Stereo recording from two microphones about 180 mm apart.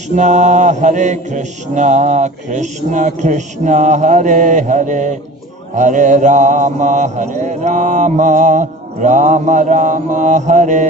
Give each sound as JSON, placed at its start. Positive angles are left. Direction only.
{"t": 0.1, "sound": "speech", "side_deg": -40}